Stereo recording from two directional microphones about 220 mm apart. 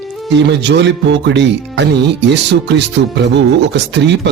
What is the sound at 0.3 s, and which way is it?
Speech, 50° right (ahead or behind).